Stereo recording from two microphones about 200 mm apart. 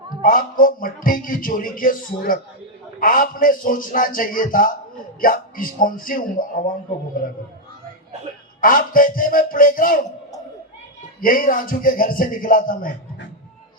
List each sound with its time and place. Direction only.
0.2 s a man's voice: 45° left (ahead or behind)
8.6 s a man's voice: 45° left (ahead or behind)
11.2 s a man's voice: 45° left (ahead or behind)